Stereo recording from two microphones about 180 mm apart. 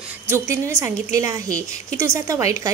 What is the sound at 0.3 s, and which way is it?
A woman's voice, 15° right (ahead or behind).